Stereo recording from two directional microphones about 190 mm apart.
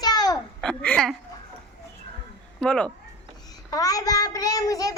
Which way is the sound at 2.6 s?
5° left (ahead or behind).